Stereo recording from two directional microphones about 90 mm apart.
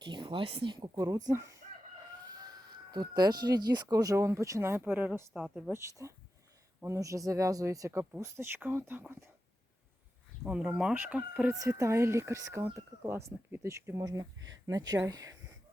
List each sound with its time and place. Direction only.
0.0 s speech: 60° right (ahead or behind)
0.8 s speech: 40° right (ahead or behind)
2.9 s speech: 50° right (ahead or behind); by 4.8 s 35° right (ahead or behind)
4.8 s speech: 20° right (ahead or behind)
5.3 s speech: 10° right (ahead or behind)
6.0 s speech: 30° right (ahead or behind)
10.4 s speech: 15° right (ahead or behind)
11.6 s speech: 35° right (ahead or behind)
14.0 s speech: 45° right (ahead or behind)